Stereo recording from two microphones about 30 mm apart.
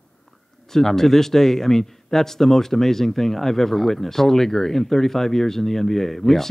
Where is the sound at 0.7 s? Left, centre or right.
Centre.